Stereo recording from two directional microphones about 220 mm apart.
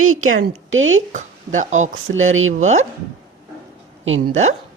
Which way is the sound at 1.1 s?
35° right (ahead or behind).